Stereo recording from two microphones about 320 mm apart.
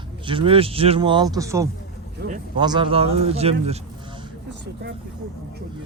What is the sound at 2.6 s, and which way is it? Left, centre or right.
A man's voice, centre.